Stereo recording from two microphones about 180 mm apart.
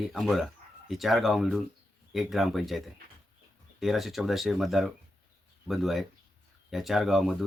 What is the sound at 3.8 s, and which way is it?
Speech, centre (ahead or behind).